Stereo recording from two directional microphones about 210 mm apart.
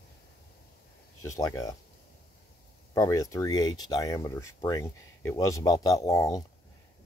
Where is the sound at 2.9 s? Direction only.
15° left (ahead or behind).